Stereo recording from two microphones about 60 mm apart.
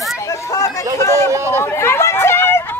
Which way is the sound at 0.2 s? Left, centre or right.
Left.